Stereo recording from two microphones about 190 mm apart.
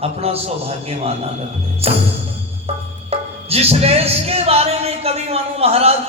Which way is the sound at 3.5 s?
30° right (ahead or behind).